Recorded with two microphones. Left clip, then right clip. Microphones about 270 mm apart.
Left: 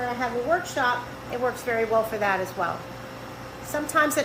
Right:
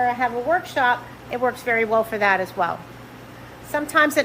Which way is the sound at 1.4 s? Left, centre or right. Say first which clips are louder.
Right 5 dB; right.